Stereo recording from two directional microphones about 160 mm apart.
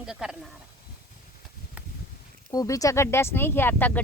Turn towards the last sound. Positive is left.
turn(degrees=10)  # may be behind; listen again after turning